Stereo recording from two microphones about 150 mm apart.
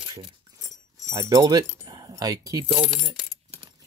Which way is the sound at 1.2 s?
25° right (ahead or behind).